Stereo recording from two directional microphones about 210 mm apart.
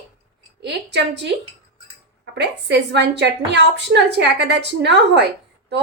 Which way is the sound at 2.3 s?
55° right (ahead or behind).